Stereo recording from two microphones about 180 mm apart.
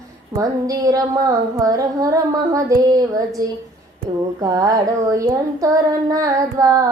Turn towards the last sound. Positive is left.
turn(degrees=-20)  # may be behind; listen again after turning